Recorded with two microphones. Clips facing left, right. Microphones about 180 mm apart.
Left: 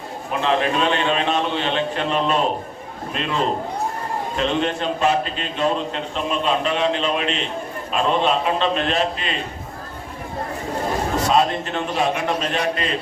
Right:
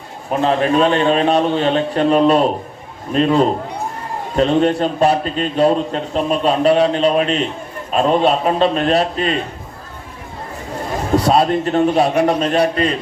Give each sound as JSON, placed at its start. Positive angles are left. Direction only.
{"t": 0.3, "sound": "a man's voice", "side_deg": -40}
{"t": 11.3, "sound": "a man's voice", "side_deg": -40}